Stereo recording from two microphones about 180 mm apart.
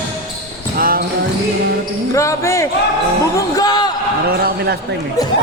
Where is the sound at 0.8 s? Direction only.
55° right (ahead or behind).